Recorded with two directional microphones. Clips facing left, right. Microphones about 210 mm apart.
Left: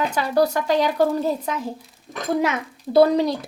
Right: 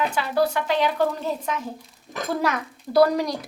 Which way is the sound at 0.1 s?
40° left (ahead or behind).